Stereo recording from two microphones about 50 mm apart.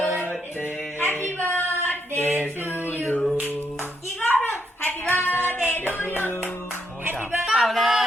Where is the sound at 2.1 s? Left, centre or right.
Right.